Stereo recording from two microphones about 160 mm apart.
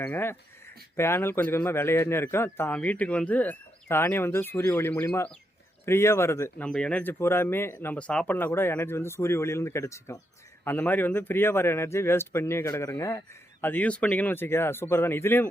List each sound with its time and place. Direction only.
0.0 s speech: 15° left (ahead or behind)
6.7 s speech: 5° left (ahead or behind)